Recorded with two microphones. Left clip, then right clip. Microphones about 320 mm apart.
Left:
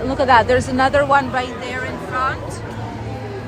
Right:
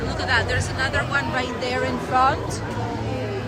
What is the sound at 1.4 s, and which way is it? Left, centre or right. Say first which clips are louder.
A woman's voice: left 1 dB; centre.